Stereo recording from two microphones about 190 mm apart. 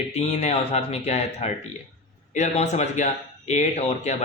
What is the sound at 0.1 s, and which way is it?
Speech, 35° left (ahead or behind).